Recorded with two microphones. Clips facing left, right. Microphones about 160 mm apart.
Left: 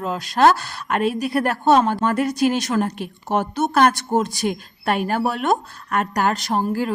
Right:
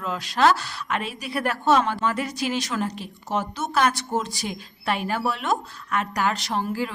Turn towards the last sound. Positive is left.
turn(degrees=45)  # may be behind; listen again after turning